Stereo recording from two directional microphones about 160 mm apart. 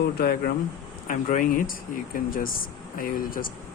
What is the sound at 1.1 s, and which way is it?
Speech, 60° left (ahead or behind).